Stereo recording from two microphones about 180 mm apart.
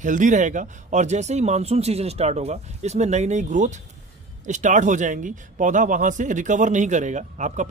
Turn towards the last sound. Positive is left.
turn(degrees=-40)  # may be behind; listen again after turning